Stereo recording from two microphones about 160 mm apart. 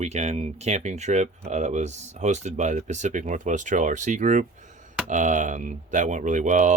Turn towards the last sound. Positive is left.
turn(degrees=-50)  # may be behind; listen again after turning